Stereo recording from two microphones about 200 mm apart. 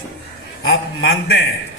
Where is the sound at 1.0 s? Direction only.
60° left (ahead or behind).